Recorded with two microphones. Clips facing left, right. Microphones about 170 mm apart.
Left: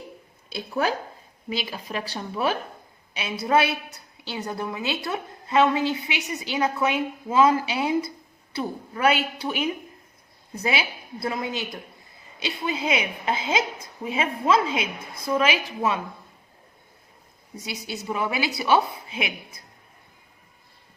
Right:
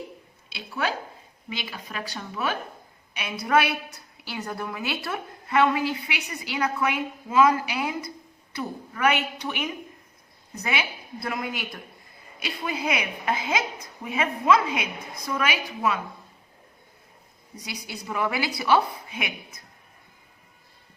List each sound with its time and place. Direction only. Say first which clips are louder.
0.5 s a woman's voice: left 4 dB; 40° left (ahead or behind)
17.6 s a woman's voice: left 4 dB; 25° left (ahead or behind)